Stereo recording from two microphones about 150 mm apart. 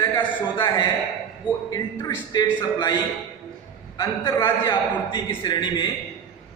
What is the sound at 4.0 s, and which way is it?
A man's voice, 25° left (ahead or behind).